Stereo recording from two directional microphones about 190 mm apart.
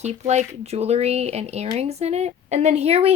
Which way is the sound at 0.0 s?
35° right (ahead or behind).